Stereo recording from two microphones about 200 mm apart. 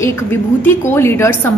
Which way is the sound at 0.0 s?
10° left (ahead or behind).